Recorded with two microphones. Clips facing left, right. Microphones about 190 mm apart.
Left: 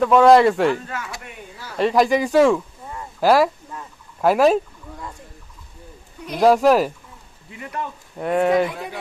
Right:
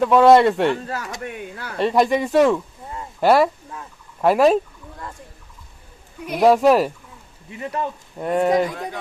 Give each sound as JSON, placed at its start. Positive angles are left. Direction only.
{"t": 0.0, "sound": "speech", "side_deg": 0}
{"t": 0.7, "sound": "speech", "side_deg": -35}
{"t": 1.2, "sound": "speech", "side_deg": -60}
{"t": 1.8, "sound": "speech", "side_deg": 0}
{"t": 3.2, "sound": "a sound", "side_deg": 0}
{"t": 4.2, "sound": "speech", "side_deg": 0}
{"t": 6.2, "sound": "speech", "side_deg": -5}
{"t": 8.2, "sound": "speech", "side_deg": 0}